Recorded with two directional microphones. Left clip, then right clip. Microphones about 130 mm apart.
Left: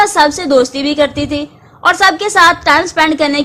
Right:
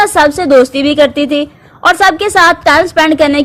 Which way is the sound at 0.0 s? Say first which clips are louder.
Right 2 dB; 35° right (ahead or behind).